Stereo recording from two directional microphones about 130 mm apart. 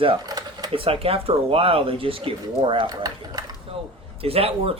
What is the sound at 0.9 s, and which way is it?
Speech, 45° right (ahead or behind).